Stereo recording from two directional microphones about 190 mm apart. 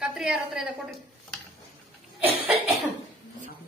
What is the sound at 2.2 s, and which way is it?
Speech, 5° right (ahead or behind).